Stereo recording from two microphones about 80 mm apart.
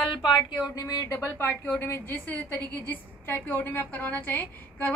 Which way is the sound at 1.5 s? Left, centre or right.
Left.